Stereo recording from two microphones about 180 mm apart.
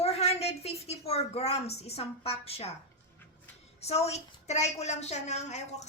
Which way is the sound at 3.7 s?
35° left (ahead or behind).